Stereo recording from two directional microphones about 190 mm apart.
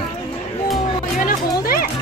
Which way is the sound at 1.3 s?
50° left (ahead or behind).